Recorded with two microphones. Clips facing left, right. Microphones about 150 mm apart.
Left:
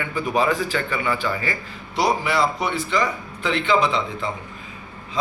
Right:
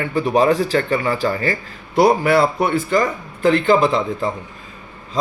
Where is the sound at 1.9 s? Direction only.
55° right (ahead or behind).